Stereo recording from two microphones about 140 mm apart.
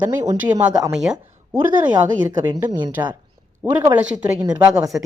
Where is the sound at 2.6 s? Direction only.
15° right (ahead or behind).